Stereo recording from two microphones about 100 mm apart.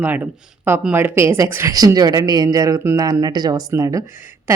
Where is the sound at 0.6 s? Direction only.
20° right (ahead or behind).